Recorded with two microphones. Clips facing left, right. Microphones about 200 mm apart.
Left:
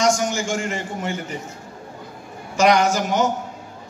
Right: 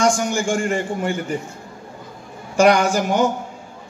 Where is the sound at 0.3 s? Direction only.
55° right (ahead or behind).